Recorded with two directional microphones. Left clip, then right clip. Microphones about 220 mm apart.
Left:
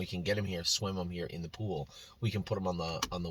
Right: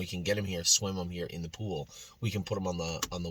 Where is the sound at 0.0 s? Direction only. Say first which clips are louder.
Right 2 dB; 15° right (ahead or behind).